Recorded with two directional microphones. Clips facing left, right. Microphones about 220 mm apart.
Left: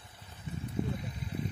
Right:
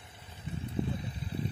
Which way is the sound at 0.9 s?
30° right (ahead or behind).